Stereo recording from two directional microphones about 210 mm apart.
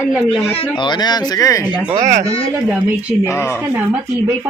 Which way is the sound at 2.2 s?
25° left (ahead or behind).